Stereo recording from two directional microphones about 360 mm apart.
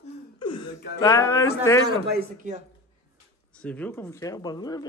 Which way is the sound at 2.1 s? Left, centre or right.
Right.